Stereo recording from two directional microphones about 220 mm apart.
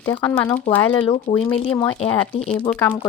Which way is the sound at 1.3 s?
35° left (ahead or behind).